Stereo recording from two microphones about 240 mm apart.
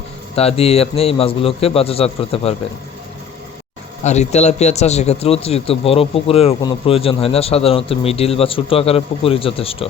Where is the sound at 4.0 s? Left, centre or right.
Left.